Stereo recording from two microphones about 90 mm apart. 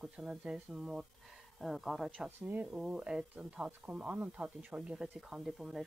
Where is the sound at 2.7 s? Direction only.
10° right (ahead or behind).